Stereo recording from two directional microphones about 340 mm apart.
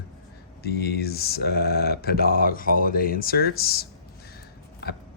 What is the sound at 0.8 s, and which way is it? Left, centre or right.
Speech, left.